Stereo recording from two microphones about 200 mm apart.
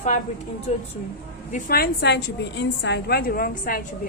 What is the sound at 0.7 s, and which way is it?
Speech, 35° left (ahead or behind).